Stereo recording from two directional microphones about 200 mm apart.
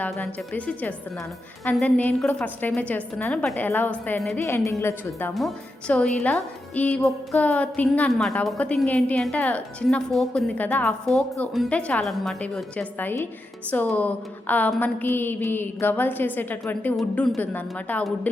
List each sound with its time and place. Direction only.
0.0 s speech: 10° left (ahead or behind)
5.3 s a woman's voice: centre (ahead or behind)